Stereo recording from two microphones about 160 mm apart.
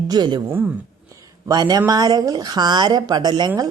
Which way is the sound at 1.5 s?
25° right (ahead or behind).